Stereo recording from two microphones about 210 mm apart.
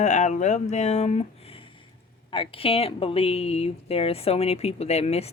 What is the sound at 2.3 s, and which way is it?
Speech, 25° left (ahead or behind).